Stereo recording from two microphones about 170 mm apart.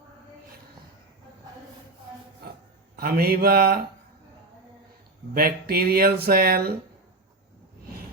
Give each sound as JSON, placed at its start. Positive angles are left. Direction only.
{"t": 2.9, "sound": "speech", "side_deg": -60}
{"t": 5.3, "sound": "speech", "side_deg": -60}